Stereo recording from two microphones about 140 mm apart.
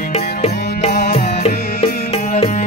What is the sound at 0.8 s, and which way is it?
Music, 75° left (ahead or behind).